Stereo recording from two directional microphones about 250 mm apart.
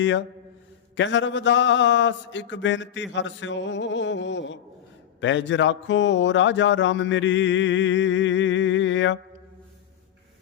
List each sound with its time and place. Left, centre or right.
0.0 s speech: left